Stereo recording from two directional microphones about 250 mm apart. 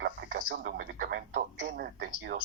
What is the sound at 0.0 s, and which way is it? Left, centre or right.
Speech, right.